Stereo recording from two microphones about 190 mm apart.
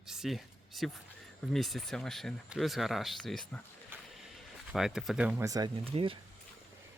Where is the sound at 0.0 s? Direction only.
Centre (ahead or behind).